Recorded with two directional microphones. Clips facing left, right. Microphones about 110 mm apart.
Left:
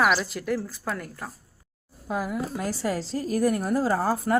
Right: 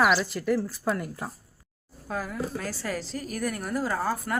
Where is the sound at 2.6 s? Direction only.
25° left (ahead or behind).